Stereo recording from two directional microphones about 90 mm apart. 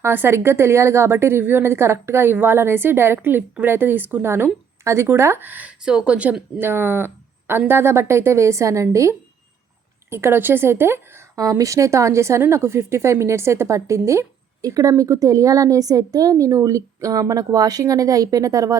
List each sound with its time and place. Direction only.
0.0 s a woman's voice: 25° right (ahead or behind)
11.3 s a woman's voice: 40° right (ahead or behind)